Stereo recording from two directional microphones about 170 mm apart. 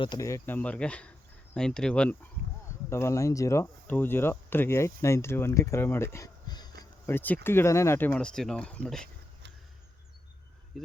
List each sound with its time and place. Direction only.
0.0 s speech: 20° left (ahead or behind)
7.1 s speech: 10° left (ahead or behind)